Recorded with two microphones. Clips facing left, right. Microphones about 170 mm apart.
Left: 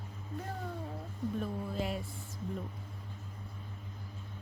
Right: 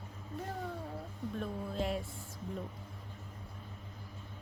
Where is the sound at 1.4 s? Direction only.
Centre (ahead or behind).